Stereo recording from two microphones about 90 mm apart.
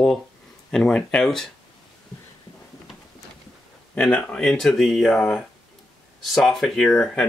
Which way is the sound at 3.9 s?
10° left (ahead or behind).